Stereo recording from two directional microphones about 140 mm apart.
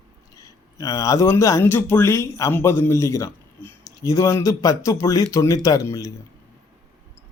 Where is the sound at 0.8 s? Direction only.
25° left (ahead or behind).